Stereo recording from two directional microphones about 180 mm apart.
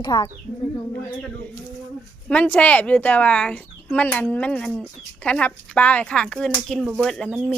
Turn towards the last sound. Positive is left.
turn(degrees=0)  # may be behind; listen again after turning